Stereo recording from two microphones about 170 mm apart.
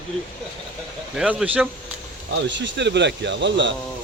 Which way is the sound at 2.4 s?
90° right.